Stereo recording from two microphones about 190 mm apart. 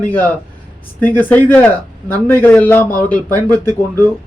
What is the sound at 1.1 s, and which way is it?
Speech, 10° left (ahead or behind).